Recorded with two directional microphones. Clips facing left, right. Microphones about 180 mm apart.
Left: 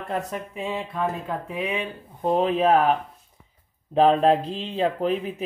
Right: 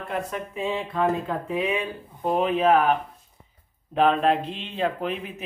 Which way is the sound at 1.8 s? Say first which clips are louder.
Even; 25° left (ahead or behind).